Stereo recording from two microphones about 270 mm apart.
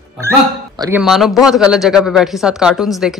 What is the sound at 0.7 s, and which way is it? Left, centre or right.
Speech, centre.